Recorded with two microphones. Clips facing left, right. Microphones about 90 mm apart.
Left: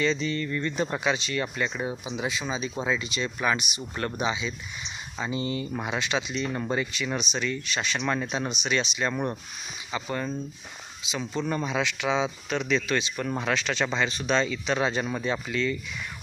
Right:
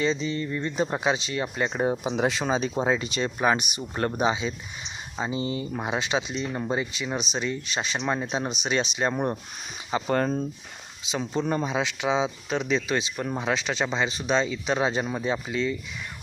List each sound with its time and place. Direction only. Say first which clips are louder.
0.0 s speech: even; 20° right (ahead or behind)
1.7 s speech: right 6 dB; 40° right (ahead or behind)
2.2 s speech: right 5 dB; 55° right (ahead or behind)
5.1 s speech: right 1 dB; 25° right (ahead or behind)
6.5 s speech: right 2 dB; 10° right (ahead or behind)
6.7 s speech: even; 20° right (ahead or behind)
9.1 s speech: right 2 dB; 20° right (ahead or behind)
10.1 s speech: right 7 dB; 60° right (ahead or behind)
11.1 s speech: right 3 dB; 45° right (ahead or behind)
11.4 s speech: right 1 dB; 30° right (ahead or behind)